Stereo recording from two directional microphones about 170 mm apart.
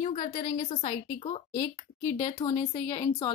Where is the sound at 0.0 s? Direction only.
50° left (ahead or behind).